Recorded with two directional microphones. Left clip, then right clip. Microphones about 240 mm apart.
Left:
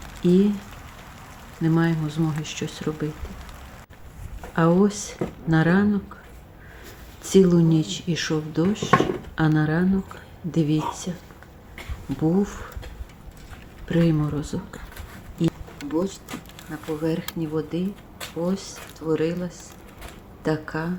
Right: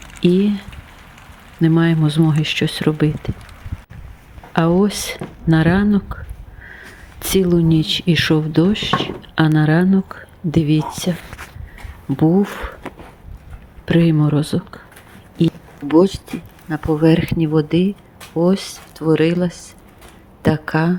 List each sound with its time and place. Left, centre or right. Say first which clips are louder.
0.2 s speech: right 4 dB; right
1.6 s speech: right 7 dB; right
4.5 s speech: right 4 dB; right
7.2 s speech: right 2 dB; right
12.1 s speech: right 7 dB; right
13.8 s speech: right 7 dB; right
15.9 s speech: right 13 dB; right